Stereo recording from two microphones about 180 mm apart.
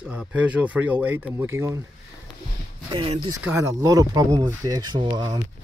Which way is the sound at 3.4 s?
15° right (ahead or behind).